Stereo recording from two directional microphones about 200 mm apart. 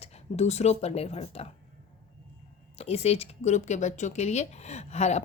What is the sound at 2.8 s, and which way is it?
Speech, 30° left (ahead or behind).